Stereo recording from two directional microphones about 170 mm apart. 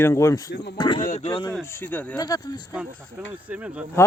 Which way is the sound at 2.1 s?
20° left (ahead or behind).